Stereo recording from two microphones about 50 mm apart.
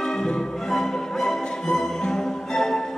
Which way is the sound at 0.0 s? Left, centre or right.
Centre.